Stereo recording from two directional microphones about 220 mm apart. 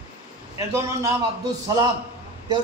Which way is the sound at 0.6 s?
15° right (ahead or behind).